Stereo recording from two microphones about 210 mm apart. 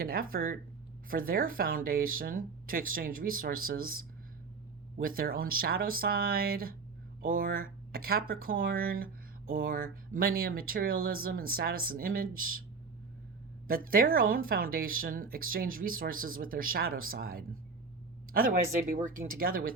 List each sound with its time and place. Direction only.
0.0 s speech: 45° right (ahead or behind)
5.0 s speech: 45° right (ahead or behind)
13.7 s speech: 45° right (ahead or behind)